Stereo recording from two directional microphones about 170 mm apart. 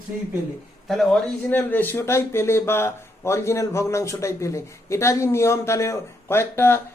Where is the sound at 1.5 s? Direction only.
10° left (ahead or behind).